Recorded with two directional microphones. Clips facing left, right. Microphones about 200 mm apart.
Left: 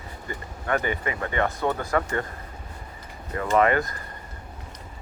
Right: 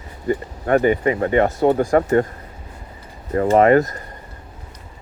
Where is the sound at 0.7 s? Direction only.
40° right (ahead or behind).